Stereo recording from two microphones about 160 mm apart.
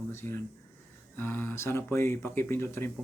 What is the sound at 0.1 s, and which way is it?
Mantra, 15° left (ahead or behind).